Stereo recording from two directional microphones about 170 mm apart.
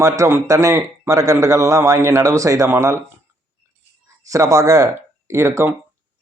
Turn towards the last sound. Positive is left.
turn(degrees=-15)  # may be behind; listen again after turning